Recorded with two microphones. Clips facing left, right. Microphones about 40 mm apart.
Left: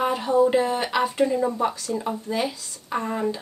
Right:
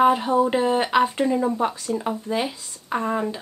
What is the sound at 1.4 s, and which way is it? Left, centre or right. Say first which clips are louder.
A woman's voice: right 1 dB; centre.